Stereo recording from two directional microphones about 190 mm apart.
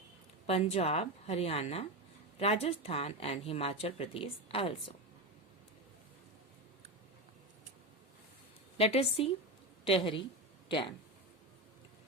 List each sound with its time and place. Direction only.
0.4 s a woman's voice: 30° left (ahead or behind)
8.8 s a woman's voice: 30° left (ahead or behind)